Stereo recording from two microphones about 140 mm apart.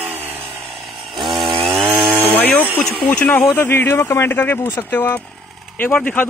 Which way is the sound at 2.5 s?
5° left (ahead or behind).